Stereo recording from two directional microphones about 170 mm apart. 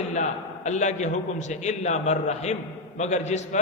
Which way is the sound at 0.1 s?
45° left (ahead or behind).